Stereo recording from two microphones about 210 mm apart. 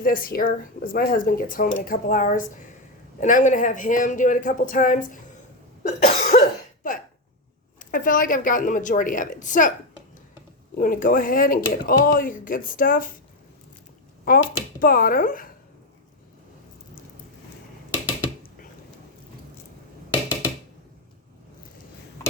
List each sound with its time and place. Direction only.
0.0 s speech: 45° left (ahead or behind)
5.8 s cough: 35° left (ahead or behind)
7.9 s speech: 40° left (ahead or behind)
10.8 s speech: 40° left (ahead or behind)
14.3 s speech: 45° left (ahead or behind)